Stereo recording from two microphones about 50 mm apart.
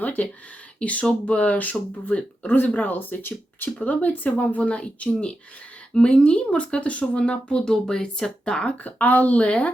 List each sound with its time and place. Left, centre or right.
0.0 s speech: left
8.8 s speech: left